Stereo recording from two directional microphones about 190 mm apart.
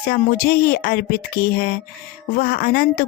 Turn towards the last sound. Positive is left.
turn(degrees=55)  # may be behind; listen again after turning